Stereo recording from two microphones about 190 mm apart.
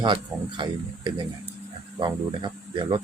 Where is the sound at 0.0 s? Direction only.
25° right (ahead or behind).